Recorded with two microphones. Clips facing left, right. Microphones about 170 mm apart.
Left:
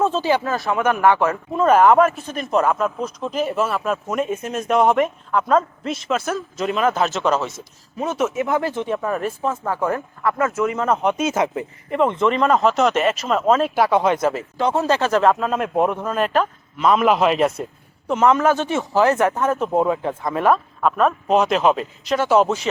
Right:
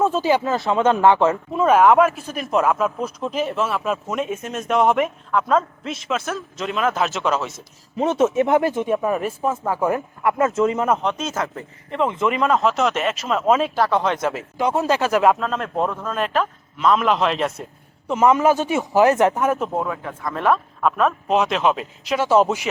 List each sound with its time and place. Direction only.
0.0 s speech: 15° right (ahead or behind)
1.5 s speech: 5° right (ahead or behind)
7.9 s speech: 30° right (ahead or behind)
8.7 s speech: 15° right (ahead or behind)
11.0 s speech: 10° left (ahead or behind)
11.9 s speech: centre (ahead or behind)
13.7 s speech: 10° left (ahead or behind)
14.6 s speech: 10° right (ahead or behind)
15.4 s speech: 10° left (ahead or behind)
16.0 s speech: centre (ahead or behind)
18.1 s speech: 5° right (ahead or behind)
19.7 s speech: 25° left (ahead or behind)
20.3 s speech: 5° left (ahead or behind)